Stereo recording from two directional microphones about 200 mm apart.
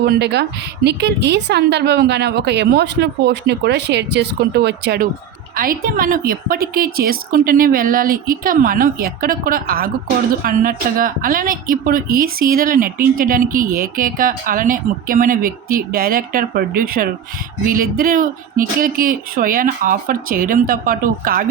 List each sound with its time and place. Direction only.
0.0 s a woman's voice: 55° right (ahead or behind)